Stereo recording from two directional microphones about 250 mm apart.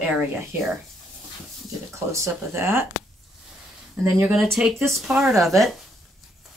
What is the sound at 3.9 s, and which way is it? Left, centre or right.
Speech, centre.